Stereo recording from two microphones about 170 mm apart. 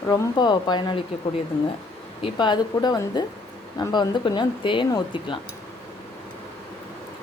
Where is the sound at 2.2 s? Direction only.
25° left (ahead or behind).